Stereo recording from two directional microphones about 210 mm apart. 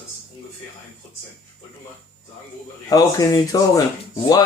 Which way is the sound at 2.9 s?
15° left (ahead or behind).